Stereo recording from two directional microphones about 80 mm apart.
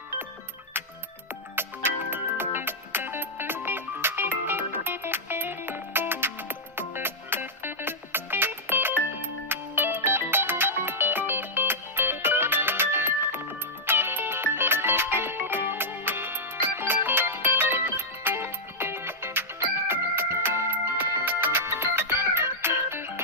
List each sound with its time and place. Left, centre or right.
1.5 s music: right